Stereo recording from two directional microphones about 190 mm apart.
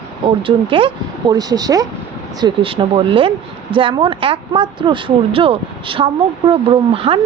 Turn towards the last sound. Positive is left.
turn(degrees=-30)  # may be behind; listen again after turning